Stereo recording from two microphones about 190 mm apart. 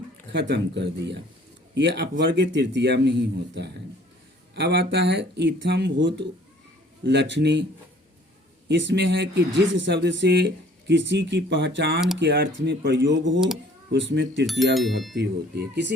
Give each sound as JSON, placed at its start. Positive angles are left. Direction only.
{"t": 0.3, "sound": "speech", "side_deg": -65}
{"t": 8.6, "sound": "speech", "side_deg": -70}
{"t": 14.6, "sound": "speech", "side_deg": 0}
{"t": 15.1, "sound": "speech", "side_deg": -60}